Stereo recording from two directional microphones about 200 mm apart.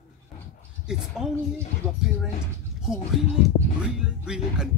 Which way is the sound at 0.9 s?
5° right (ahead or behind).